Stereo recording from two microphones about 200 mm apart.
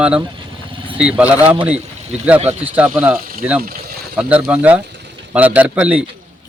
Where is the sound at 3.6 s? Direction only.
50° right (ahead or behind).